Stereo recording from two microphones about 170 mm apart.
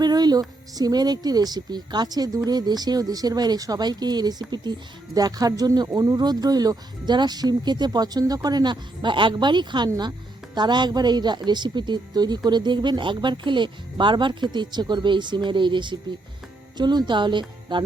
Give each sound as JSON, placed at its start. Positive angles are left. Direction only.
{"t": 0.0, "sound": "speech", "side_deg": -25}